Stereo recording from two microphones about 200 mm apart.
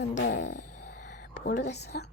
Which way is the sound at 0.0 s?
65° left (ahead or behind).